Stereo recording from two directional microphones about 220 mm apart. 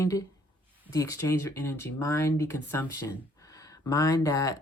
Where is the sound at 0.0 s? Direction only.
15° left (ahead or behind).